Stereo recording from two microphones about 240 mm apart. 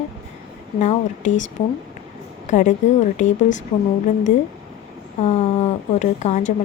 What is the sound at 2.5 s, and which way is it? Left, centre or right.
A woman's voice, left.